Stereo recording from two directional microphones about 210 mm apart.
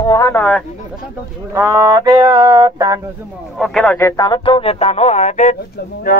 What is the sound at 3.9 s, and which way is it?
A man's voice, 15° left (ahead or behind).